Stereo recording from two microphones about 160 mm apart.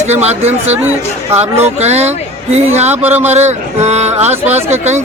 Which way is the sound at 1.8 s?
40° right (ahead or behind).